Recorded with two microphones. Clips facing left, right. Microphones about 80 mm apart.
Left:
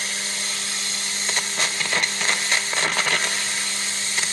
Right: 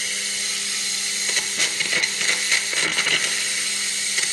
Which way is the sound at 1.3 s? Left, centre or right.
Left.